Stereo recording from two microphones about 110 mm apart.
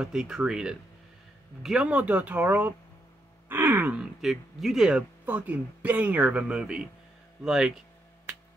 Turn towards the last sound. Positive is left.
turn(degrees=-5)  # may be behind; listen again after turning